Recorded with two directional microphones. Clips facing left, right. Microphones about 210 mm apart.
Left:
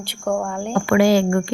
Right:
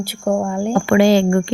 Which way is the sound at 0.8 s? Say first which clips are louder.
Right 2 dB; 25° right (ahead or behind).